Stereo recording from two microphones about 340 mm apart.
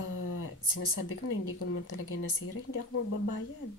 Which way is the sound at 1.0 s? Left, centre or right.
Left.